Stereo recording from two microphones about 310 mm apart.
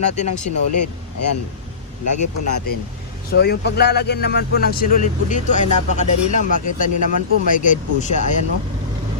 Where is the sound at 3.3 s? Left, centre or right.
Left.